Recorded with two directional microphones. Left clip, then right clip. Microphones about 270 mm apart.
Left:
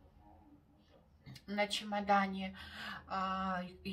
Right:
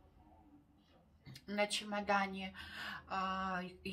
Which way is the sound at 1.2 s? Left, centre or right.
Centre.